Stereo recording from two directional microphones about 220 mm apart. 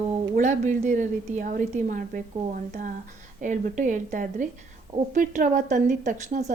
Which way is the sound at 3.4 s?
35° right (ahead or behind).